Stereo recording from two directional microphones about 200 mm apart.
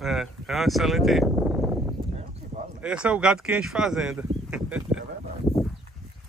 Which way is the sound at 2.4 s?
40° right (ahead or behind).